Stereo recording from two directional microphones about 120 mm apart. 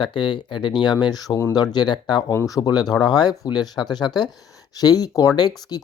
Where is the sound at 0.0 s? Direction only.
40° left (ahead or behind).